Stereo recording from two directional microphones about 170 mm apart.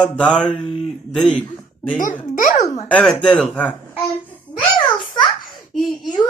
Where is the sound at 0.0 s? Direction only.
5° left (ahead or behind).